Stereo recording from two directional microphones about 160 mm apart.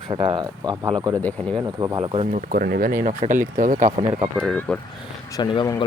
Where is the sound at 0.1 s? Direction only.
35° right (ahead or behind).